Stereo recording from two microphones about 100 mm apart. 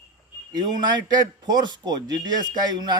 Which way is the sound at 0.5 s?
45° right (ahead or behind).